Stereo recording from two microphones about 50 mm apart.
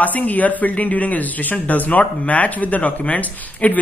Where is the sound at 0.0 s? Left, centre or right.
Left.